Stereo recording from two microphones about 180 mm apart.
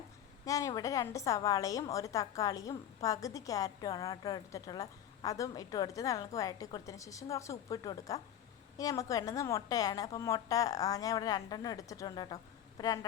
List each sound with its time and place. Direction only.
0.4 s a woman's voice: 20° left (ahead or behind)